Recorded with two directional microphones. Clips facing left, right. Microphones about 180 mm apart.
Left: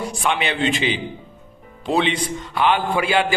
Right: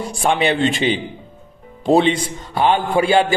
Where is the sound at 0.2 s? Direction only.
40° right (ahead or behind).